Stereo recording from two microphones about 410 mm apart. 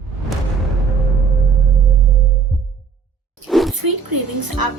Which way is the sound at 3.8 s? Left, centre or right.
Right.